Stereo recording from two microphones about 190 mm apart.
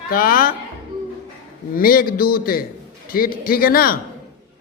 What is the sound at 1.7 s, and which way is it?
A man's voice, 50° left (ahead or behind).